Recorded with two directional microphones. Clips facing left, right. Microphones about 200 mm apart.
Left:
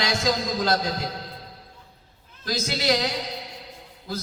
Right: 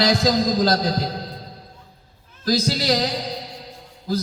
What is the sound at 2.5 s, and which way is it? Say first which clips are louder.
Speech: right 4 dB; 35° right (ahead or behind).